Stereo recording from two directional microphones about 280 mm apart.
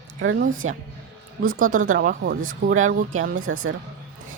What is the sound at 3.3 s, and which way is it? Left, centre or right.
Speech, right.